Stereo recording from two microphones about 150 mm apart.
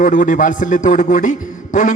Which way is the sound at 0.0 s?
60° left (ahead or behind).